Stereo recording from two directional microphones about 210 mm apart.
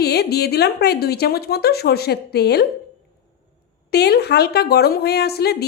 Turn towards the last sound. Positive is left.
turn(degrees=50)  # may be behind; listen again after turning